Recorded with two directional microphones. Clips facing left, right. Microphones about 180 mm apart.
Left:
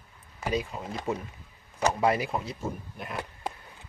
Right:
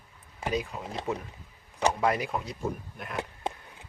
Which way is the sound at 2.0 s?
5° left (ahead or behind).